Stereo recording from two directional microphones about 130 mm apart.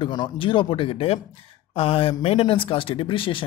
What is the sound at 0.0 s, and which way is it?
Speech, 40° left (ahead or behind).